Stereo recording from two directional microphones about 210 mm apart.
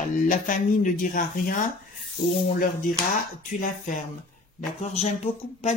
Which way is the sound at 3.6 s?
40° left (ahead or behind).